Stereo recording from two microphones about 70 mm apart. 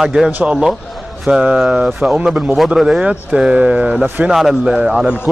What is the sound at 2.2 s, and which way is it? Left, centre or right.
Speech, centre.